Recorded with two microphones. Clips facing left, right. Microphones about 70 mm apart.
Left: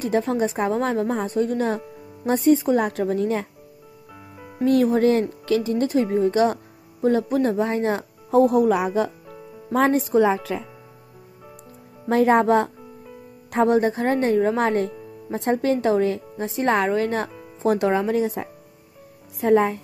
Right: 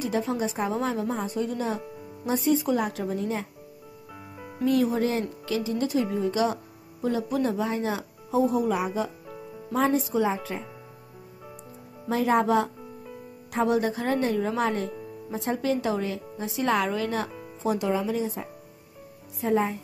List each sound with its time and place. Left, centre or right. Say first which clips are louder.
0.0 s speech: left 5 dB; left
4.6 s speech: left 6 dB; left
12.1 s speech: left 6 dB; left
17.6 s speech: left 6 dB; left